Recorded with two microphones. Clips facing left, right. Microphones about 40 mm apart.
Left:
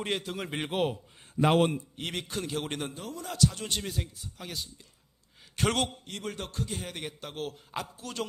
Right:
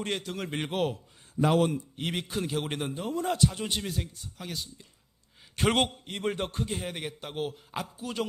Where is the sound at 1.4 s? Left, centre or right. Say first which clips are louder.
Left 1 dB; left.